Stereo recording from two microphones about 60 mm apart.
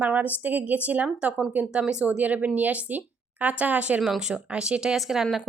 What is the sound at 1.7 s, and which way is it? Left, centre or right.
Speech, centre.